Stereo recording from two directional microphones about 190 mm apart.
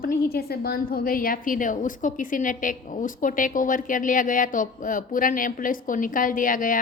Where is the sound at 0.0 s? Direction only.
50° left (ahead or behind).